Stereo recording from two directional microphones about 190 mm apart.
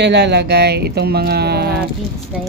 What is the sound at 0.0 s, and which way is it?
Speech, 65° right (ahead or behind).